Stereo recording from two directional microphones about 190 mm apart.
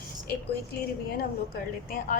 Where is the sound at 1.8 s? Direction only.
45° left (ahead or behind).